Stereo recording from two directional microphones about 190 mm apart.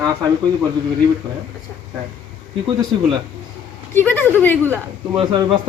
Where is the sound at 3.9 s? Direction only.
10° left (ahead or behind).